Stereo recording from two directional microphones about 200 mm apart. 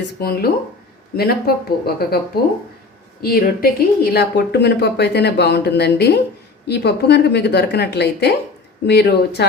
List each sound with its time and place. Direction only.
0.0 s speech: 50° left (ahead or behind)